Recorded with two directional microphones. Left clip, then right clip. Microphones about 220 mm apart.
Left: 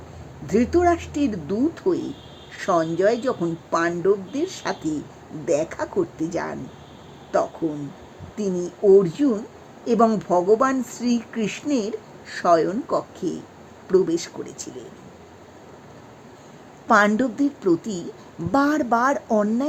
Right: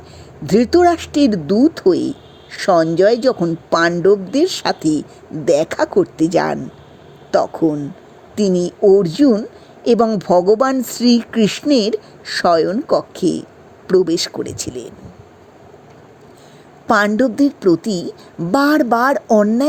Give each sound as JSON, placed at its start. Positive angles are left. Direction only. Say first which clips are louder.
{"t": 0.4, "sound": "speech", "louder": "right 7 dB", "side_deg": -35}
{"t": 16.8, "sound": "a woman's voice", "louder": "right 4 dB", "side_deg": -25}